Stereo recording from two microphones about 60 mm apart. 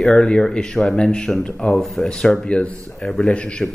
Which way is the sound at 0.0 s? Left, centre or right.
Centre.